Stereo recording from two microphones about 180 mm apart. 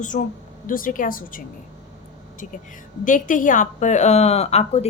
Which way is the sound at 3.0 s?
45° left (ahead or behind).